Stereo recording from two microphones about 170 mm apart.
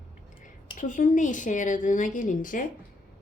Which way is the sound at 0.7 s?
50° left (ahead or behind).